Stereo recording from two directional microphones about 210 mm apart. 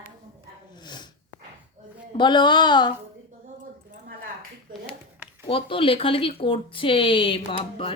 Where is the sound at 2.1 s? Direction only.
20° left (ahead or behind).